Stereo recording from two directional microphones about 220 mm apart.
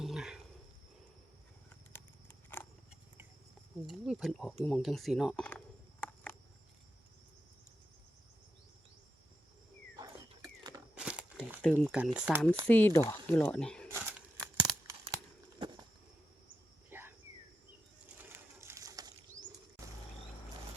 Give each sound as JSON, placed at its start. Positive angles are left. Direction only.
{"t": 0.0, "sound": "wild animals", "side_deg": 0}
{"t": 3.8, "sound": "speech", "side_deg": 0}
{"t": 4.6, "sound": "a sound", "side_deg": 0}
{"t": 10.9, "sound": "crumpling", "side_deg": -5}
{"t": 11.6, "sound": "speech", "side_deg": 5}
{"t": 12.6, "sound": "speech", "side_deg": 10}
{"t": 13.8, "sound": "a sound", "side_deg": -10}
{"t": 14.5, "sound": "tearing", "side_deg": -15}
{"t": 15.5, "sound": "a sound", "side_deg": -20}
{"t": 16.9, "sound": "cricket", "side_deg": -10}
{"t": 18.0, "sound": "bird", "side_deg": -10}